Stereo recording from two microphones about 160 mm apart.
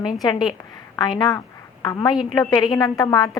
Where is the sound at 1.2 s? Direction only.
25° left (ahead or behind).